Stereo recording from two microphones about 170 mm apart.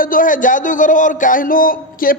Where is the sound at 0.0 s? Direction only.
55° left (ahead or behind).